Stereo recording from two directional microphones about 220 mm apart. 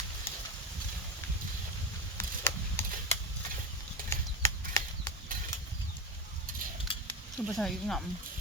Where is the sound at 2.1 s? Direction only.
10° left (ahead or behind).